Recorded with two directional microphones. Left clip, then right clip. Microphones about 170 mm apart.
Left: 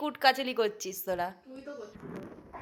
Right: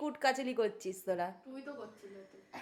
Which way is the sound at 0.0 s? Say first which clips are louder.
Left 7 dB; 10° left (ahead or behind).